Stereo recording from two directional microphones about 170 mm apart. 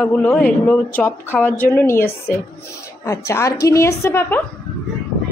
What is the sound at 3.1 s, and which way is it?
A woman's voice, 15° left (ahead or behind).